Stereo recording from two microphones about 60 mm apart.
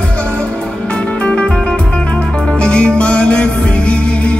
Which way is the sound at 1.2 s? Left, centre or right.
Centre.